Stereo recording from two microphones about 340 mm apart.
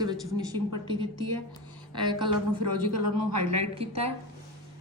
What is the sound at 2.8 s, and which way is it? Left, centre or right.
Speech, right.